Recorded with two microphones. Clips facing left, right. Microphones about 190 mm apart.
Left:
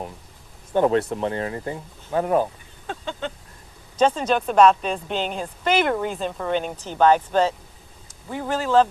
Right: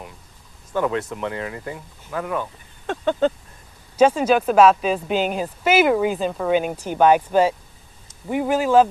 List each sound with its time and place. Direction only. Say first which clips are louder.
0.9 s speech: left 4 dB; 35° left (ahead or behind)
2.8 s a sound: right 9 dB; 65° right (ahead or behind)
3.9 s speech: right 4 dB; 10° right (ahead or behind)